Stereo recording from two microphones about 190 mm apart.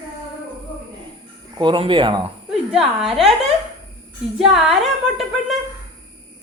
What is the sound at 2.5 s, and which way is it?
Speech, 5° right (ahead or behind).